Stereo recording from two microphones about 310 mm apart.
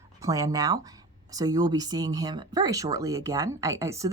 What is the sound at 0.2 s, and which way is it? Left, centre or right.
Speech, centre.